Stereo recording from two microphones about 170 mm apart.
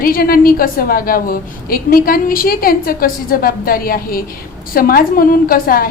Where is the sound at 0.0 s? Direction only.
60° left (ahead or behind).